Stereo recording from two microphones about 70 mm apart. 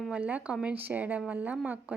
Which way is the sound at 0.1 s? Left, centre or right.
Right.